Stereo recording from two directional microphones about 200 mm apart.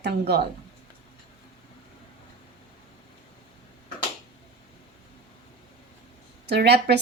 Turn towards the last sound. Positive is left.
turn(degrees=-55)  # may be behind; listen again after turning